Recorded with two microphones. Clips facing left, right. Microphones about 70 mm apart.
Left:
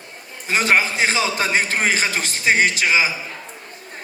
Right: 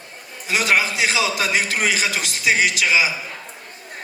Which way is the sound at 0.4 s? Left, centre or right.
Left.